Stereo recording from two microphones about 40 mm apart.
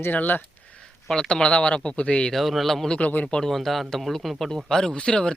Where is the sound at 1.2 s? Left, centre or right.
Left.